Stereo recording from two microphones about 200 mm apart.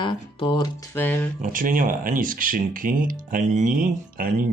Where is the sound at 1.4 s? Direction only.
40° right (ahead or behind).